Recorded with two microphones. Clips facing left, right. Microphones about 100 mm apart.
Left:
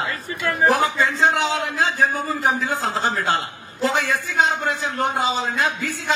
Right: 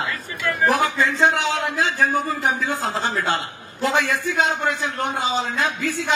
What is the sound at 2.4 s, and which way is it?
A woman's voice, 40° left (ahead or behind).